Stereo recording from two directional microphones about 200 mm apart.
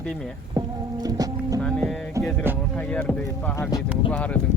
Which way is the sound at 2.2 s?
5° left (ahead or behind).